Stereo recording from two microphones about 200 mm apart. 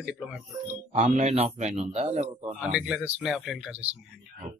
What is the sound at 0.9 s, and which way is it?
A man's voice, 35° right (ahead or behind).